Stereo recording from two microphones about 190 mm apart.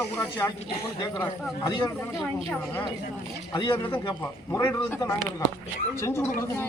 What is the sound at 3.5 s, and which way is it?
Speech, 25° left (ahead or behind).